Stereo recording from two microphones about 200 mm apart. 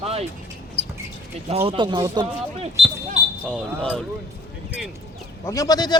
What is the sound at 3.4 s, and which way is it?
Speech, centre (ahead or behind).